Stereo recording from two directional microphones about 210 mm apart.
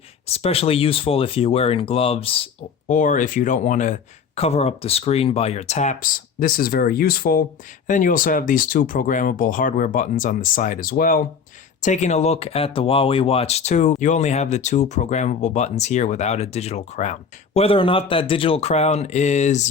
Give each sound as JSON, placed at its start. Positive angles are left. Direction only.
{"t": 0.3, "sound": "speech", "side_deg": 30}